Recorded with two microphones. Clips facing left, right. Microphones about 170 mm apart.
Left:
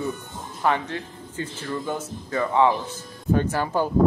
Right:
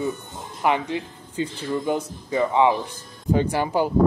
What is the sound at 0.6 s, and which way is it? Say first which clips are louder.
Speech: right 2 dB; 15° right (ahead or behind).